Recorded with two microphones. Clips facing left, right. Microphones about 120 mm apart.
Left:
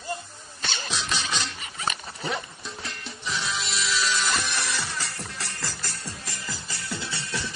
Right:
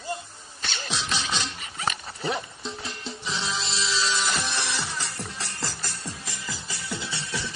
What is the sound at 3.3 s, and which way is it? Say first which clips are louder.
Music: left 1 dB; 25° right (ahead or behind).